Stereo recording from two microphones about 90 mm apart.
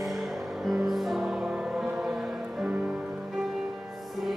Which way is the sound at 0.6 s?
5° right (ahead or behind).